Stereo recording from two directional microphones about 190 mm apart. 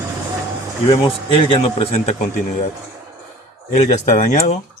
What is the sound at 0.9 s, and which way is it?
Speech, 30° left (ahead or behind).